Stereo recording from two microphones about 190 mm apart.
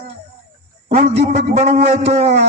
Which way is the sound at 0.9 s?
35° right (ahead or behind).